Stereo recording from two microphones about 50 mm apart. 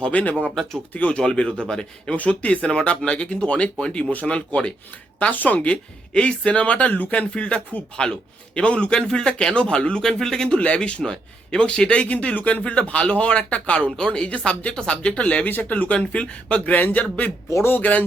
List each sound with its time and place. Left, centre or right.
0.0 s speech: left
0.6 s speech: centre
0.9 s speech: left
2.1 s speech: left
5.3 s speech: left
15.4 s speech: left